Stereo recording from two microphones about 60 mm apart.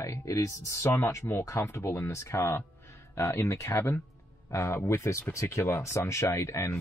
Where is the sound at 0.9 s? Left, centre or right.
Left.